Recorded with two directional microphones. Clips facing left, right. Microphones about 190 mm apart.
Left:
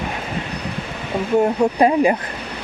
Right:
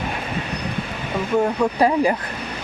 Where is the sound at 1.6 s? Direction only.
20° left (ahead or behind).